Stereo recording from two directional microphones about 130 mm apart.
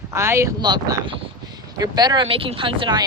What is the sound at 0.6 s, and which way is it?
Speech, 30° right (ahead or behind).